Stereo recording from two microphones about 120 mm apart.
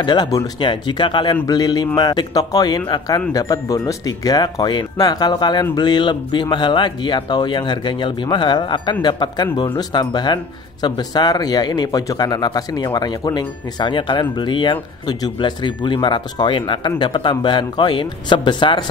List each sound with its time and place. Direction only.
0.0 s speech: 35° left (ahead or behind)